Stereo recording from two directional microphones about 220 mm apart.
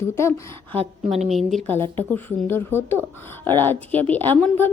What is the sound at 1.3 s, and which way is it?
Speech, centre (ahead or behind).